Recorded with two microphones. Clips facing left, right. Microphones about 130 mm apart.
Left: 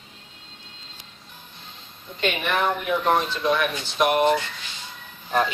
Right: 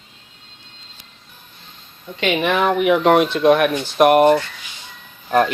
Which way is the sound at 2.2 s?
90° right.